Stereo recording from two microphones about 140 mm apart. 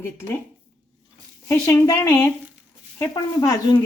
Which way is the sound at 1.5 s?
20° left (ahead or behind).